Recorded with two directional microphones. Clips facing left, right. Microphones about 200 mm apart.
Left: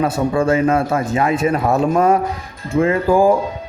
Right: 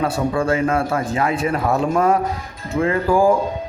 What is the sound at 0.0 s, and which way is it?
A man's voice, 25° left (ahead or behind).